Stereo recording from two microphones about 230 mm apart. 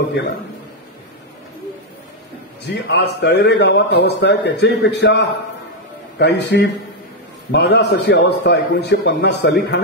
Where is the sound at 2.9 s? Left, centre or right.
Left.